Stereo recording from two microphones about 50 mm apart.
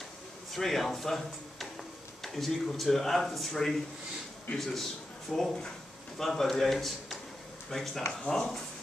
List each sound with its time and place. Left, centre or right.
0.5 s speech: centre